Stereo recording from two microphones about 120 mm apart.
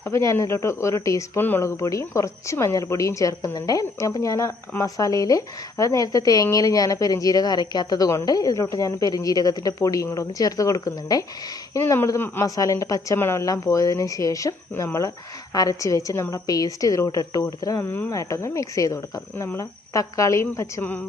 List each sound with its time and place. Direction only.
0.1 s speech: 25° left (ahead or behind)
17.8 s speech: 15° left (ahead or behind)
18.1 s speech: 25° left (ahead or behind)